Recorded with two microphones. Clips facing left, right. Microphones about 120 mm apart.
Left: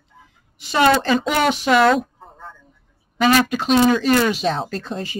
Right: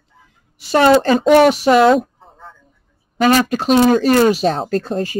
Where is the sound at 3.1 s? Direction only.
40° right (ahead or behind).